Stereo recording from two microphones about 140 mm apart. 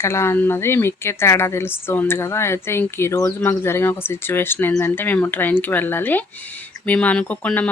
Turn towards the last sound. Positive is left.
turn(degrees=10)  # may be behind; listen again after turning